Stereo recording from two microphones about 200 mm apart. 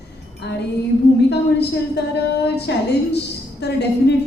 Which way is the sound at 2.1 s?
55° left (ahead or behind).